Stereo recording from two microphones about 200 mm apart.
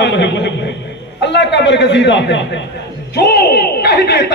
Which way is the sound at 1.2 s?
60° left (ahead or behind).